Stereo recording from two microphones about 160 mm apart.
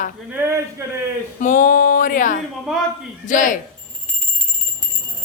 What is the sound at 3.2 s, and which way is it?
Speech, 55° left (ahead or behind).